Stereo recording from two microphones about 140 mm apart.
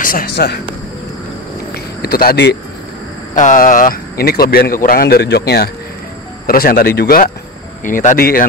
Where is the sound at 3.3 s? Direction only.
65° left (ahead or behind); by 7.3 s 90° left.